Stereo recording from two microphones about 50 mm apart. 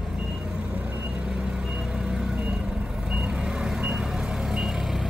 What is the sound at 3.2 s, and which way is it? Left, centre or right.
Vehicle, centre.